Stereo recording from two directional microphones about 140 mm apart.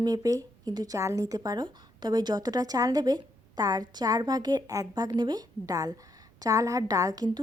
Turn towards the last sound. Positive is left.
turn(degrees=-30)  # may be behind; listen again after turning